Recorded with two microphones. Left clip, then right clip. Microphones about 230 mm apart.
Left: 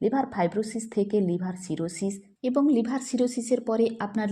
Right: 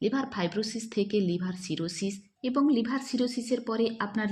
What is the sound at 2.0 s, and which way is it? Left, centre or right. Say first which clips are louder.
A woman's voice: left 4 dB; centre.